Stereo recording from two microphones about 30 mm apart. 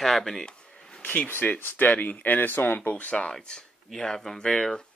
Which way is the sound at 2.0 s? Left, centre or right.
Left.